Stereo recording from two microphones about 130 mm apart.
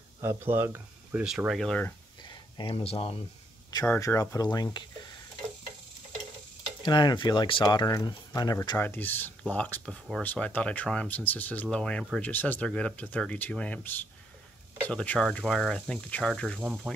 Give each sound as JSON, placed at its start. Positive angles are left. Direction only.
{"t": 0.2, "sound": "speech", "side_deg": -20}
{"t": 1.2, "sound": "speech", "side_deg": -5}
{"t": 2.2, "sound": "a sound", "side_deg": 40}
{"t": 4.0, "sound": "speech", "side_deg": 25}
{"t": 6.8, "sound": "speech", "side_deg": 35}
{"t": 8.7, "sound": "speech", "side_deg": 15}